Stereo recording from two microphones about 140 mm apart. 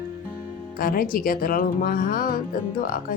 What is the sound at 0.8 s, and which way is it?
Speech, 90° left.